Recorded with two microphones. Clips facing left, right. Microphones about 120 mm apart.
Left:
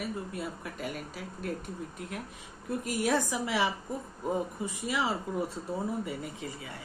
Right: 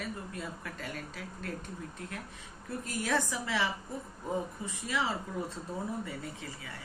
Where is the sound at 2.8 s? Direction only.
15° left (ahead or behind).